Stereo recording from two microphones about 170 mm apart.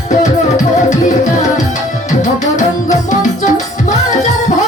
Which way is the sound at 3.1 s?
45° left (ahead or behind).